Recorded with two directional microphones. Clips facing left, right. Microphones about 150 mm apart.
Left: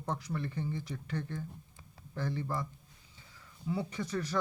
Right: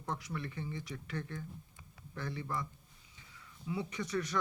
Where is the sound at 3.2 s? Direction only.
35° left (ahead or behind).